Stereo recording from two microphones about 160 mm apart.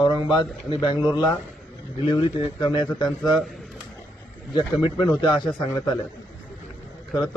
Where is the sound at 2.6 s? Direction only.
30° left (ahead or behind).